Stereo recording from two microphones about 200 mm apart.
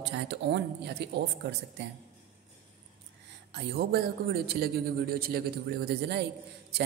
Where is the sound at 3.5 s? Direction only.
55° right (ahead or behind).